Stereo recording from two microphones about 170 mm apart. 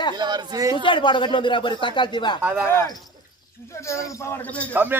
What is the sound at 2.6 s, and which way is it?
Speech, 15° left (ahead or behind).